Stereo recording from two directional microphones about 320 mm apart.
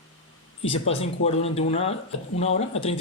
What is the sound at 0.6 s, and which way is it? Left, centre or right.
Speech, centre.